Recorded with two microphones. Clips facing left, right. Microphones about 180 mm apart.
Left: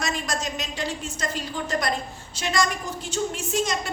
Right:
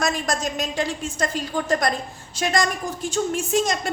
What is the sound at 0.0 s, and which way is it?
A woman's voice, 50° right (ahead or behind).